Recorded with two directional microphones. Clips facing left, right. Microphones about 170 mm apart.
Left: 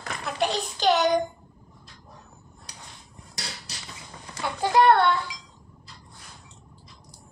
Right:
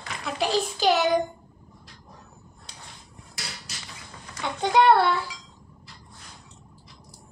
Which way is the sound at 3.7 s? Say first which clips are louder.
Even; 35° left (ahead or behind).